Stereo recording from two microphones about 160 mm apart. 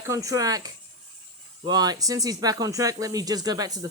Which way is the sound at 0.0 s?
20° right (ahead or behind).